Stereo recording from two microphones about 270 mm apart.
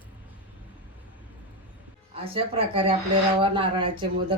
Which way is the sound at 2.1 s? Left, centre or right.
Right.